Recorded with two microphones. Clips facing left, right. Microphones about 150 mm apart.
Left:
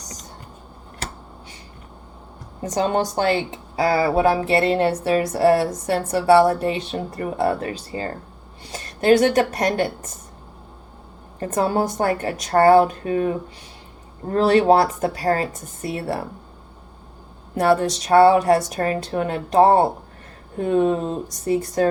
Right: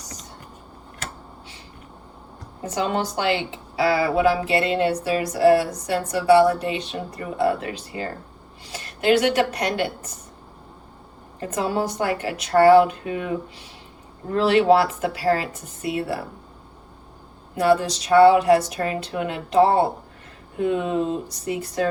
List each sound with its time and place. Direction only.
2.6 s a woman's voice: 40° left (ahead or behind)
6.4 s a woman's voice: 45° left (ahead or behind)
11.3 s a woman's voice: 45° left (ahead or behind)
17.7 s a woman's voice: 45° left (ahead or behind)